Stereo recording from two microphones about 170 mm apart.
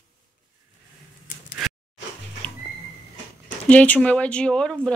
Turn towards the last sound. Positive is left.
turn(degrees=5)  # may be behind; listen again after turning